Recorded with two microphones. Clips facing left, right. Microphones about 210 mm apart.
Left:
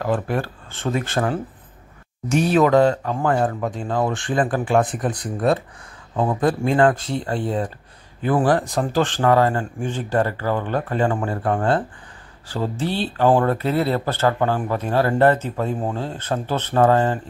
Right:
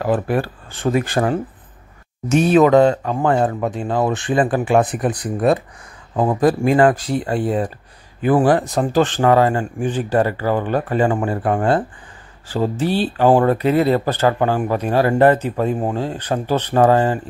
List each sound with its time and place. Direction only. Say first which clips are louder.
0.0 s speech: right 4 dB; 15° right (ahead or behind)
2.2 s speech: right 4 dB; 20° right (ahead or behind)